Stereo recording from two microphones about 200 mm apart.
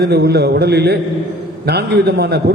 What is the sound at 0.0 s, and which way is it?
A man's voice, 55° right (ahead or behind).